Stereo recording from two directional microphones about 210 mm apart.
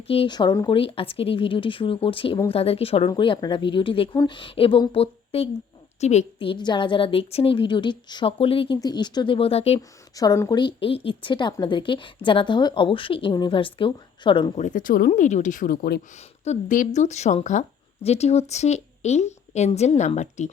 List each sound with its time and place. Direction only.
0.1 s a woman's voice: 25° left (ahead or behind)
10.2 s a woman's voice: 15° left (ahead or behind); by 16.0 s 45° left (ahead or behind)
16.4 s speech: 35° left (ahead or behind)